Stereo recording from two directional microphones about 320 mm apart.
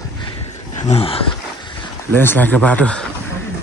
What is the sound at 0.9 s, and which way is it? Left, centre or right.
Speech, centre.